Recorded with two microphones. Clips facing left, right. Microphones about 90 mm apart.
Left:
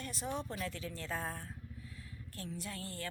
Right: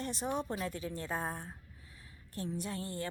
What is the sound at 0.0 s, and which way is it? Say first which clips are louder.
A woman's voice: right 4 dB; 20° right (ahead or behind).